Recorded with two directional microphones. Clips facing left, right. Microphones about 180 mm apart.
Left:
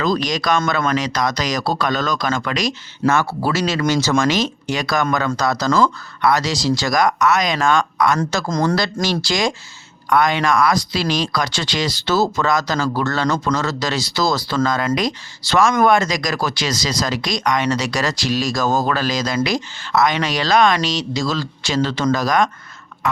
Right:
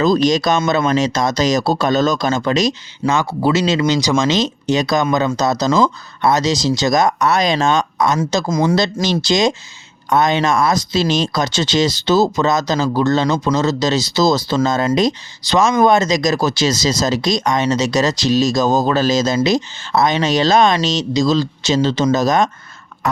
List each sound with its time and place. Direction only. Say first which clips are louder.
0.0 s speech: right 6 dB; 25° right (ahead or behind)